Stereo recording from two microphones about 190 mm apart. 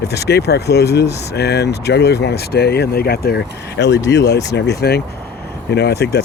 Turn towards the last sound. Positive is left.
turn(degrees=60)  # may be behind; listen again after turning